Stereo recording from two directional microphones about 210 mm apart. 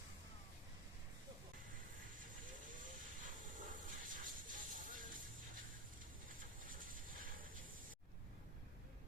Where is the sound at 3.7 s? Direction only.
40° right (ahead or behind).